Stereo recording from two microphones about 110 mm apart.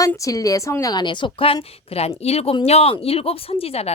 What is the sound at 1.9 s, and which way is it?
Speech, 65° left (ahead or behind).